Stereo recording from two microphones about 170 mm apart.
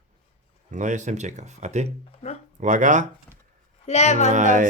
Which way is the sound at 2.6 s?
45° right (ahead or behind).